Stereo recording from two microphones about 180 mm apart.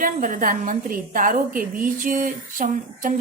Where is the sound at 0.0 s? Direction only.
50° right (ahead or behind).